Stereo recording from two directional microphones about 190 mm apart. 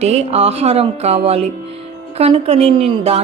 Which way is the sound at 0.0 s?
35° right (ahead or behind).